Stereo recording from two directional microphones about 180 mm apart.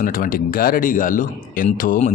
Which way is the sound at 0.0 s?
50° left (ahead or behind).